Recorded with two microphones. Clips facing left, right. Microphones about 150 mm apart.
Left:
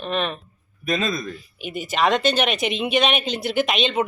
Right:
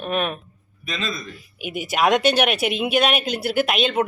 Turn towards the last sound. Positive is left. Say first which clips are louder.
# right 1 dB
turn(degrees=-5)  # may be behind; listen again after turning